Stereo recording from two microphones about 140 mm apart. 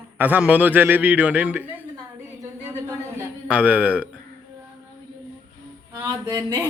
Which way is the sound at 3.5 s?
10° right (ahead or behind).